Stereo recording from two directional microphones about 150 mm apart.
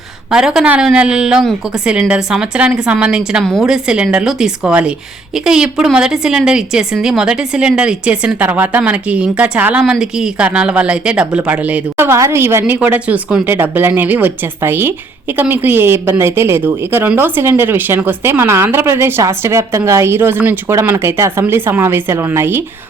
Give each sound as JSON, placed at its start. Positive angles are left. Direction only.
{"t": 0.3, "sound": "a woman's voice", "side_deg": -5}